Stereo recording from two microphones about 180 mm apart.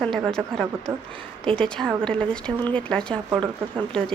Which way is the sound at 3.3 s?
25° right (ahead or behind).